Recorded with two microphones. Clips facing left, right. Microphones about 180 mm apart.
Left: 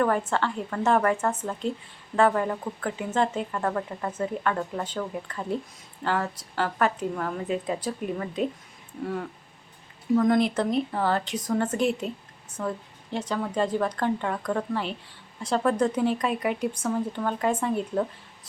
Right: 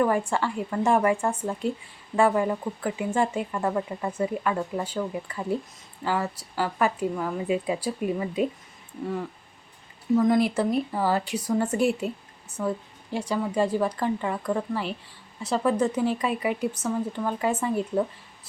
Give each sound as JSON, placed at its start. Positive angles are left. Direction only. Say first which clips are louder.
{"t": 0.0, "sound": "a woman's voice", "louder": "right 1 dB", "side_deg": -10}
{"t": 10.2, "sound": "a woman's voice", "louder": "even", "side_deg": -5}